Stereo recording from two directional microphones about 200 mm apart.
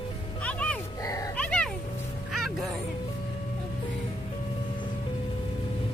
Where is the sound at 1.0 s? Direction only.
15° left (ahead or behind).